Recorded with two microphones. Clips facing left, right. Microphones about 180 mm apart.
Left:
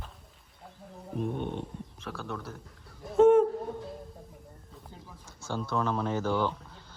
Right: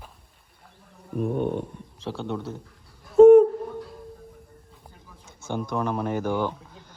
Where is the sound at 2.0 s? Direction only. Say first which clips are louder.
Right 8 dB; 25° right (ahead or behind).